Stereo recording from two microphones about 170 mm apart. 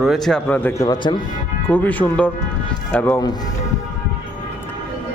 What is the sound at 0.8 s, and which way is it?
Speech, 25° left (ahead or behind).